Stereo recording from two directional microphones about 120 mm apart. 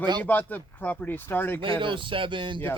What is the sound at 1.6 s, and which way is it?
Speech, 45° right (ahead or behind).